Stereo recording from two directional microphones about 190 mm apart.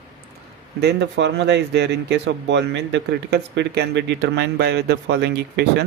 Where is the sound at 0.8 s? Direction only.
65° right (ahead or behind).